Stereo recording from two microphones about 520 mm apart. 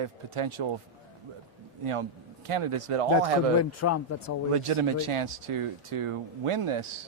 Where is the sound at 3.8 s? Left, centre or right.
Left.